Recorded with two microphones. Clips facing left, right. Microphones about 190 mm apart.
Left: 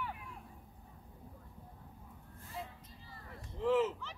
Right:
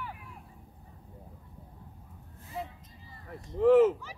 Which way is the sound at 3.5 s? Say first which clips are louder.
Right 11 dB; 55° right (ahead or behind).